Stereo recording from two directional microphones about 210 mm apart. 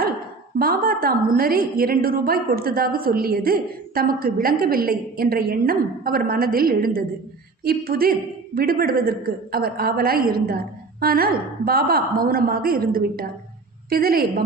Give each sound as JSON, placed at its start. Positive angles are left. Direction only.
{"t": 0.6, "sound": "a woman's voice", "side_deg": -45}